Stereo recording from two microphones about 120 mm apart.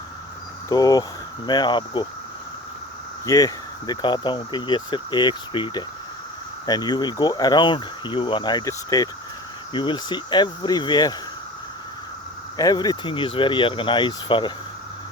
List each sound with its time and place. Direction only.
0.7 s speech: 30° left (ahead or behind)
3.2 s speech: 30° left (ahead or behind)
12.5 s speech: 30° left (ahead or behind)